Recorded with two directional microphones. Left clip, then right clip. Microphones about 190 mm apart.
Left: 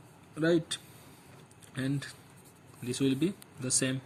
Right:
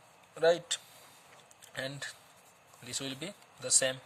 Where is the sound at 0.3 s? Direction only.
45° right (ahead or behind).